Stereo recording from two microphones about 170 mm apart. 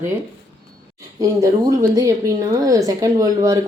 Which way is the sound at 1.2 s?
20° right (ahead or behind).